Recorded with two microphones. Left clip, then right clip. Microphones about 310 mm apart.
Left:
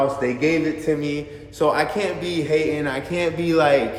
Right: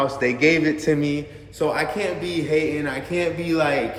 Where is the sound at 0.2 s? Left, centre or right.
Centre.